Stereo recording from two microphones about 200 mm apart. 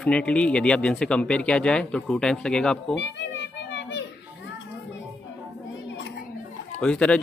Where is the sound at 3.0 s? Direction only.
60° left (ahead or behind).